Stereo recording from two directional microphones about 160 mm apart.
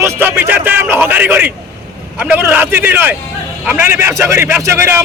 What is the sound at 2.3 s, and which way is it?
A man's voice, 10° right (ahead or behind).